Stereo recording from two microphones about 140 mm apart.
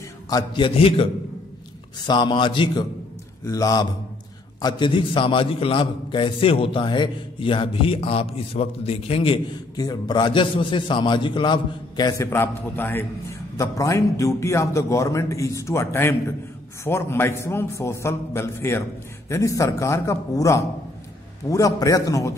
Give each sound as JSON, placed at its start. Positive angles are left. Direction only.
{"t": 0.3, "sound": "a man's voice", "side_deg": 30}
{"t": 2.0, "sound": "a man's voice", "side_deg": 30}
{"t": 9.8, "sound": "a man's voice", "side_deg": 30}
{"t": 12.2, "sound": "a man's voice", "side_deg": 15}